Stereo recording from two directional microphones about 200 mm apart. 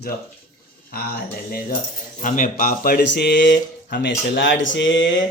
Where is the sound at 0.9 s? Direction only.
50° left (ahead or behind).